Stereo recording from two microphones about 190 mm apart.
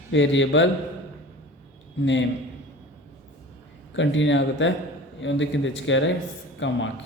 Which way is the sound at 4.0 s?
75° left (ahead or behind).